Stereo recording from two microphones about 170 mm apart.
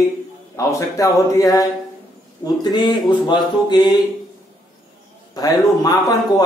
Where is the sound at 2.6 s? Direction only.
25° left (ahead or behind).